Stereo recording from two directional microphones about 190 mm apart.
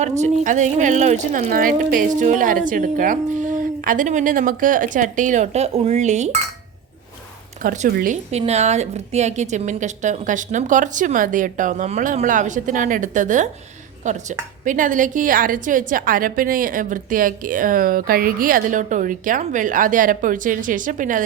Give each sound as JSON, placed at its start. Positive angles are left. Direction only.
{"t": 0.2, "sound": "a woman's voice", "side_deg": -40}
{"t": 7.6, "sound": "a woman's voice", "side_deg": -45}